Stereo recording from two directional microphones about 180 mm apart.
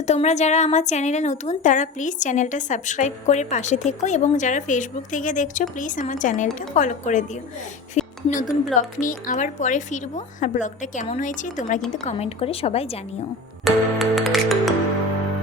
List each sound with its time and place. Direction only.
0.0 s a woman's voice: 40° left (ahead or behind)
7.9 s a sound: 45° left (ahead or behind)
9.0 s a woman's voice: 45° left (ahead or behind)
12.0 s a woman's voice: 35° left (ahead or behind)
13.7 s music: centre (ahead or behind)